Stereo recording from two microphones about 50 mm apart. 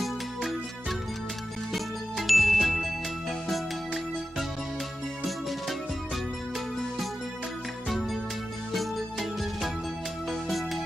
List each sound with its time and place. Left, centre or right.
0.0 s music: centre
1.7 s jingle: centre
8.7 s music: centre